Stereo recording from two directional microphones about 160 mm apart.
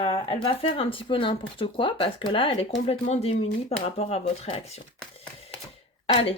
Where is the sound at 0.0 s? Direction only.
35° left (ahead or behind).